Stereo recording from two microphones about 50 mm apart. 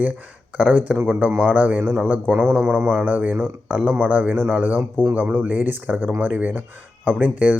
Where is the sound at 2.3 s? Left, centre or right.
Right.